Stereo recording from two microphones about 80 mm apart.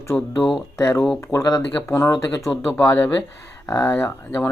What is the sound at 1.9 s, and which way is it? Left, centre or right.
Speech, left.